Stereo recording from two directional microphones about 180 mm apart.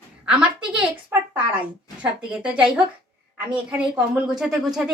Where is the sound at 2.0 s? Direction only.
5° right (ahead or behind).